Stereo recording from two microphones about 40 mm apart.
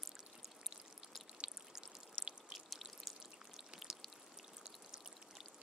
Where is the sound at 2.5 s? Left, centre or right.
Centre.